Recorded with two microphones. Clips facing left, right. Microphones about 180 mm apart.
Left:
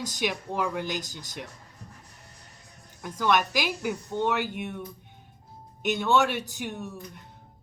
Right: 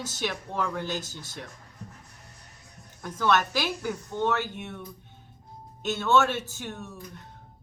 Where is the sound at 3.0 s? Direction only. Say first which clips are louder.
Even; 15° left (ahead or behind).